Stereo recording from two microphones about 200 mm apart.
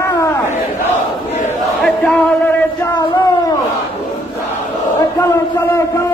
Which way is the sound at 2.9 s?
15° left (ahead or behind).